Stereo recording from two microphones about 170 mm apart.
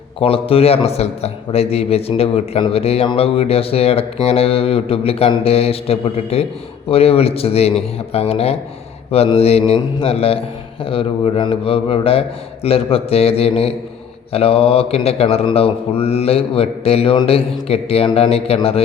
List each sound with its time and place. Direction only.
0.2 s a man's voice: 35° left (ahead or behind)